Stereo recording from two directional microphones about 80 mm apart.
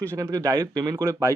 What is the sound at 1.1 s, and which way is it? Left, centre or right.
Speech, right.